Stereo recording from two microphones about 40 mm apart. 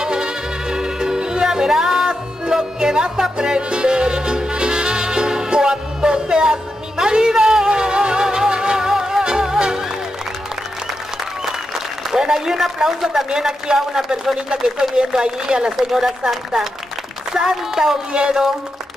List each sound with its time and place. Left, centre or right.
0.0 s music: centre
12.1 s a man's voice: centre
15.7 s a man's voice: centre